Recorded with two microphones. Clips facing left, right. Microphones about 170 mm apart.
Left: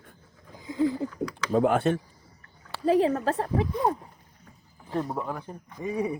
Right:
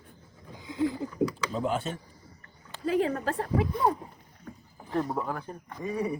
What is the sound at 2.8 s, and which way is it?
Speech, 35° left (ahead or behind).